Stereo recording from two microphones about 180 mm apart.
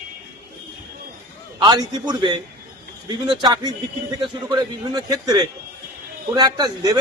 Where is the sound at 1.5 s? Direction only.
25° right (ahead or behind).